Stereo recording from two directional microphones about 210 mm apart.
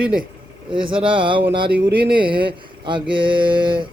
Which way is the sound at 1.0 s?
25° right (ahead or behind).